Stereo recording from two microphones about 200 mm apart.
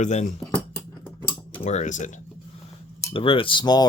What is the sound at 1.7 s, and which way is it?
Speech, 35° left (ahead or behind).